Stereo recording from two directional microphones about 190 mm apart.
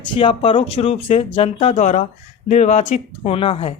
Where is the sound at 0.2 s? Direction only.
30° left (ahead or behind).